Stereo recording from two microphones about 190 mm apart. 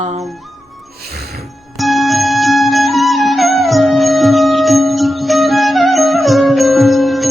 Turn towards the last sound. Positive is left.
turn(degrees=0)  # may be behind; listen again after turning